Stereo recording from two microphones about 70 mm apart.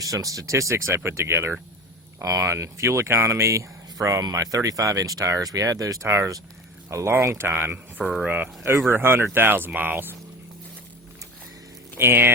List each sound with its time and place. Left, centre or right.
0.0 s speech: right
2.1 s speech: right
4.2 s speech: right
6.1 s speech: right
8.0 s speech: centre
8.3 s speech: right
11.9 s speech: right